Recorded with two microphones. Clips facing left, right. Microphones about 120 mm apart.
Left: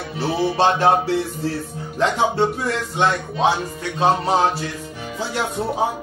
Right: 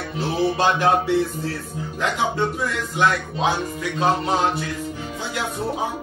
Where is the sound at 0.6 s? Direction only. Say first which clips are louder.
Left 4 dB; 30° left (ahead or behind).